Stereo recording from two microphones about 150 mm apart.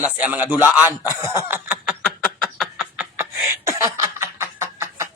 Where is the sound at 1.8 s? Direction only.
5° left (ahead or behind).